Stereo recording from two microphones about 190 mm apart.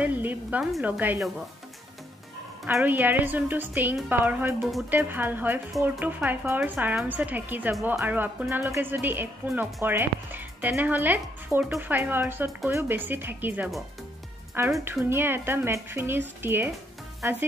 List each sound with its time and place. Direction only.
0.0 s speech: 10° right (ahead or behind)
2.6 s speech: 10° right (ahead or behind)